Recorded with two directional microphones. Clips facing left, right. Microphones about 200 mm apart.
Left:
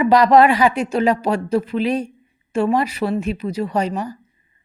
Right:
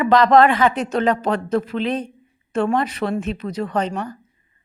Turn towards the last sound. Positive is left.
turn(degrees=5)  # may be behind; listen again after turning